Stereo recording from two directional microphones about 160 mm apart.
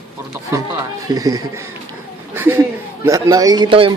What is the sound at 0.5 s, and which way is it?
A man's voice, 15° right (ahead or behind).